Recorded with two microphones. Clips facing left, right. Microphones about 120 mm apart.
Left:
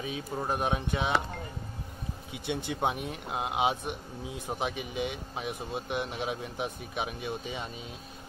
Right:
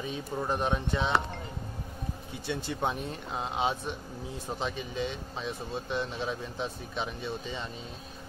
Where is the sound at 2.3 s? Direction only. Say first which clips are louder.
Left 1 dB; 20° left (ahead or behind).